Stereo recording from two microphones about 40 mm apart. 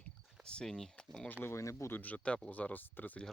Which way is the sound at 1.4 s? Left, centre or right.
Left.